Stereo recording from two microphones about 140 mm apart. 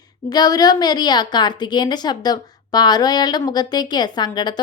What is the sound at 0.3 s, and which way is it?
A woman's voice, 30° left (ahead or behind).